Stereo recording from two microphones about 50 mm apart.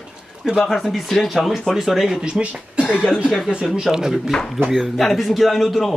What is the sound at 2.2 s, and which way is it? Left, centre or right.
Speech, centre.